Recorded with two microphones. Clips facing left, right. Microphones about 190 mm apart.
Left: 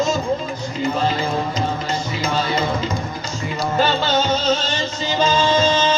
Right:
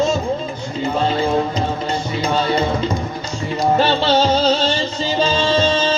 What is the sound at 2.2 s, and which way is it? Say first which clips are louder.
Music: right 4 dB; 30° right (ahead or behind).